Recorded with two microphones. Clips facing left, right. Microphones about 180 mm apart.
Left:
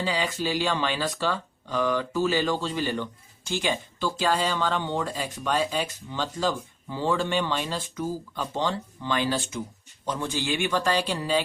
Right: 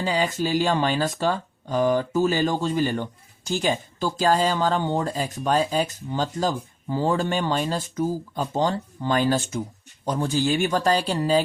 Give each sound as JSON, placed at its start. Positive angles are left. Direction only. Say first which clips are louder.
{"t": 0.0, "sound": "speech", "louder": "right 4 dB", "side_deg": -45}